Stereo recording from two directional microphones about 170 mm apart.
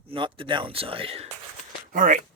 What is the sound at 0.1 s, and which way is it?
Speech, 30° right (ahead or behind).